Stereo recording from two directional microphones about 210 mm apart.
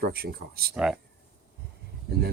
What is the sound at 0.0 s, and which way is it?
Speech, 45° right (ahead or behind).